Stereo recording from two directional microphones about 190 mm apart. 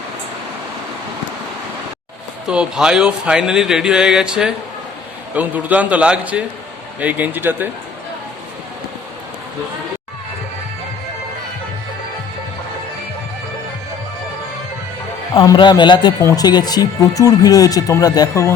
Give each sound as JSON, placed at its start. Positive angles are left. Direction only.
{"t": 2.5, "sound": "a man's voice", "side_deg": -5}
{"t": 15.4, "sound": "speech", "side_deg": 25}